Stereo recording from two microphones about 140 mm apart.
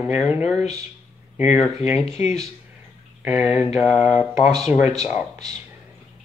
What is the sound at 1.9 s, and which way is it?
Speech, 50° left (ahead or behind).